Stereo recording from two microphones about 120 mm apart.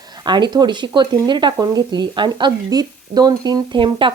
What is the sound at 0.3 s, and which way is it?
Speech, 40° right (ahead or behind).